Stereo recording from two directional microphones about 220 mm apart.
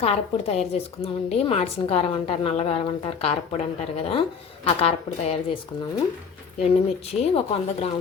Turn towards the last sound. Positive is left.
turn(degrees=25)  # may be behind; listen again after turning